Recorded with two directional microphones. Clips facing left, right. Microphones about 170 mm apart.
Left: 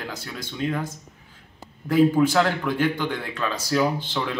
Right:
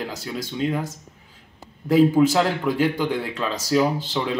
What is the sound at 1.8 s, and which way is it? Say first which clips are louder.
Speech: right 2 dB; 5° right (ahead or behind).